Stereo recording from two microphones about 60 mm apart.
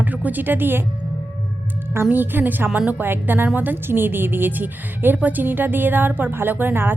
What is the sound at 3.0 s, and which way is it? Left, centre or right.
A woman's voice, right.